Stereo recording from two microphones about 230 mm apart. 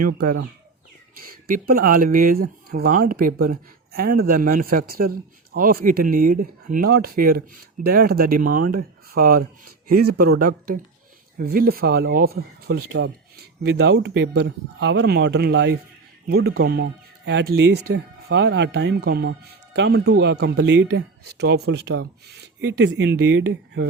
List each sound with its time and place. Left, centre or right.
0.0 s speech: right
8.4 s speech: right
8.7 s speech: right